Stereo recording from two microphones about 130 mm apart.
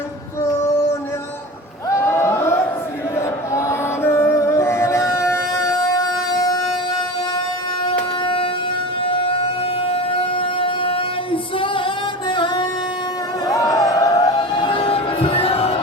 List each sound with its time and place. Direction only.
2.0 s a sound: 20° left (ahead or behind)
3.2 s music: 20° left (ahead or behind)
8.2 s siren: 40° left (ahead or behind)
9.0 s a sound: 40° left (ahead or behind)
12.3 s music: 40° left (ahead or behind)
13.5 s music: 30° left (ahead or behind); by 15.8 s 50° left (ahead or behind)